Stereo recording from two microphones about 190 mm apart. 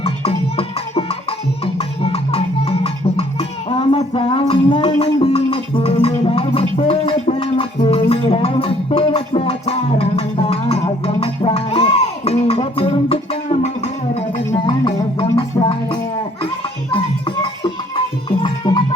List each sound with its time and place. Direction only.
0.0 s music: 30° left (ahead or behind)